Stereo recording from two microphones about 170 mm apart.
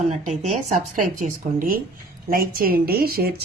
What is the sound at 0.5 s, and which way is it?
Speech, 50° right (ahead or behind).